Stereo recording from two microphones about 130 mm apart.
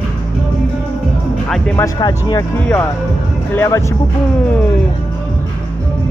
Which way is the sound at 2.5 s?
10° left (ahead or behind).